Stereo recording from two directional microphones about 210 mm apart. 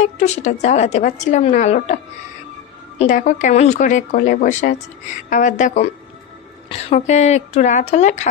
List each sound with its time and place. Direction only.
0.0 s a woman's voice: 30° left (ahead or behind)
3.0 s a woman's voice: 35° left (ahead or behind)